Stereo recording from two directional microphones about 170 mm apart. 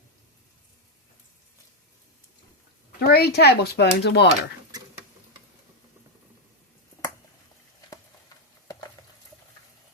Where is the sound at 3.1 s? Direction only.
75° left (ahead or behind).